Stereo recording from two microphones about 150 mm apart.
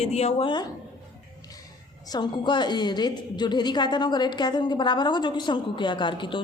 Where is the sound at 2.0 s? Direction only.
30° left (ahead or behind).